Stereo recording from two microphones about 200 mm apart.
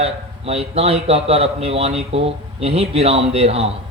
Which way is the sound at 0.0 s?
30° right (ahead or behind).